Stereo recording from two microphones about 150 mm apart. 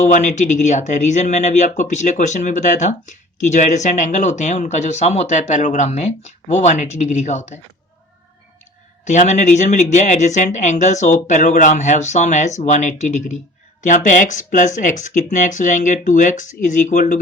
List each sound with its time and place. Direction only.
0.0 s speech: 55° left (ahead or behind)
9.0 s speech: 50° left (ahead or behind)